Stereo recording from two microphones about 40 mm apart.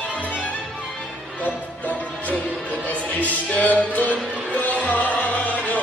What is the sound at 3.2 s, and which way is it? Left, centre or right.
Music, left.